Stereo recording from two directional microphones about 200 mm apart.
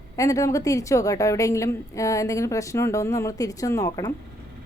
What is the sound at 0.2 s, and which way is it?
A woman's voice, 15° left (ahead or behind).